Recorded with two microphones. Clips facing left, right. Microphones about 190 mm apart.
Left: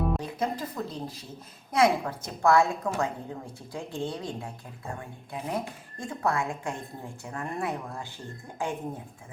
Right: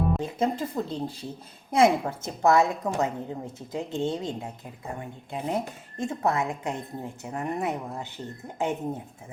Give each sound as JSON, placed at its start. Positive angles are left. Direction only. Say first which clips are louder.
{"t": 0.2, "sound": "a woman's voice", "louder": "right 4 dB", "side_deg": -25}